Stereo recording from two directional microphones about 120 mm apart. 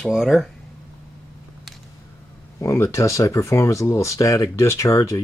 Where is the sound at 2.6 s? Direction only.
25° left (ahead or behind).